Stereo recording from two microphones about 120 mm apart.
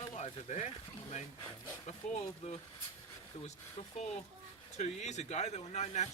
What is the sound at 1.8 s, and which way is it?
Speech, 65° left (ahead or behind).